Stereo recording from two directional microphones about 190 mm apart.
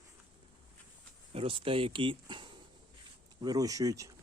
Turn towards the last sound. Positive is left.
turn(degrees=-15)  # may be behind; listen again after turning